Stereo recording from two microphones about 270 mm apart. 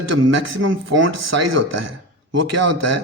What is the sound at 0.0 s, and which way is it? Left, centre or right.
Speech, right.